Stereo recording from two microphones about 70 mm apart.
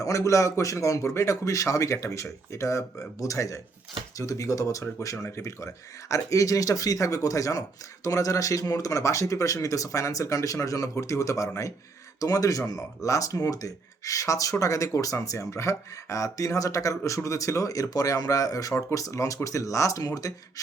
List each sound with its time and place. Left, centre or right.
0.0 s speech: left
12.2 s speech: left
18.7 s speech: left
18.9 s speech: left